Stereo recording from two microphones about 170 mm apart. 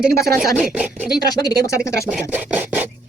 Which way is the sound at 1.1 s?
25° left (ahead or behind).